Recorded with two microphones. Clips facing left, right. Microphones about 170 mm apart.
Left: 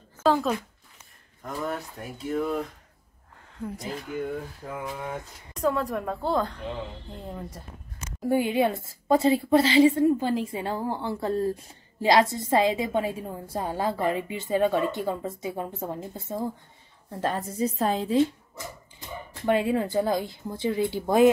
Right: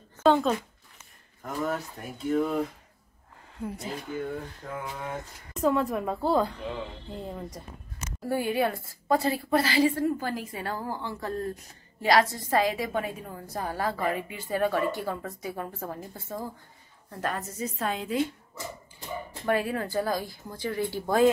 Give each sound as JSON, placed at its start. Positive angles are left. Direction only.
{"t": 0.2, "sound": "speech", "side_deg": 0}
{"t": 1.7, "sound": "a woman's voice", "side_deg": 0}
{"t": 8.2, "sound": "a woman's voice", "side_deg": 15}
{"t": 19.4, "sound": "a woman's voice", "side_deg": 20}